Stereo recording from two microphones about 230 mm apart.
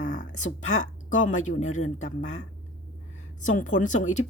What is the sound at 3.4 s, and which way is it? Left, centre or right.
Speech, left.